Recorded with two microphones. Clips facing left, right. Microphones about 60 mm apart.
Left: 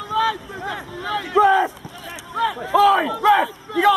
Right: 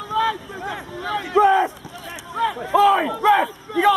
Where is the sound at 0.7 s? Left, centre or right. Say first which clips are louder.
Even; centre.